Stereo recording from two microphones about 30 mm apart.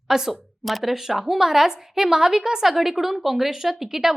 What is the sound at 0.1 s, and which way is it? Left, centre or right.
Speech, centre.